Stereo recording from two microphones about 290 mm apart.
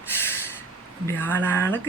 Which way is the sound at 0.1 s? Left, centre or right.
Centre.